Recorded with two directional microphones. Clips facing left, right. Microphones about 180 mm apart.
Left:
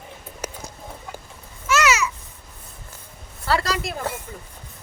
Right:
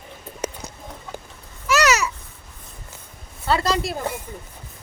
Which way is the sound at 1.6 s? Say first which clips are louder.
Right 1 dB; 40° right (ahead or behind).